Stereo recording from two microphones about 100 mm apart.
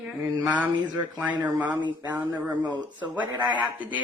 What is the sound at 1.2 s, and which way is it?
Speech, 15° right (ahead or behind).